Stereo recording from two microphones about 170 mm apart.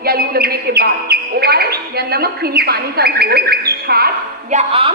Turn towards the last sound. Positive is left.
turn(degrees=-35)  # may be behind; listen again after turning